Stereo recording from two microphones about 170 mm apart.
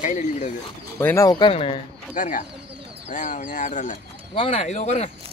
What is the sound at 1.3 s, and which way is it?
Speech, 30° left (ahead or behind).